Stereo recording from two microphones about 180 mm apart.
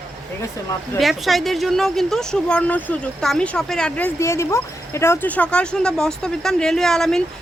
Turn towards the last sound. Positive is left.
turn(degrees=0)  # may be behind; listen again after turning